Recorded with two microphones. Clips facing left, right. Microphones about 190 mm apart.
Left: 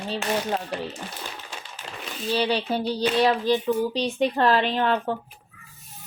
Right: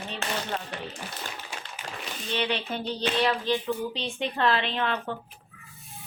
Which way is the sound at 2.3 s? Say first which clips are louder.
Left 6 dB; 35° left (ahead or behind).